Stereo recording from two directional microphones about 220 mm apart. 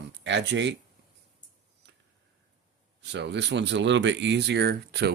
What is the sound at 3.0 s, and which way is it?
Speech, 50° right (ahead or behind).